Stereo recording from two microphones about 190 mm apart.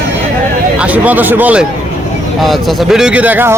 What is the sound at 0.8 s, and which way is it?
Speech, 10° right (ahead or behind).